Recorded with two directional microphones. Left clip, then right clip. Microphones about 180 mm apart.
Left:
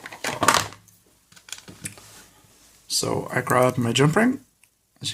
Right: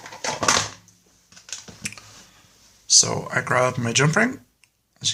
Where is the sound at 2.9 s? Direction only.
20° left (ahead or behind).